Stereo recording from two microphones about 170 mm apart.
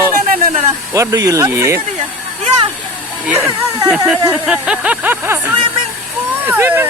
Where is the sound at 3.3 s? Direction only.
20° right (ahead or behind).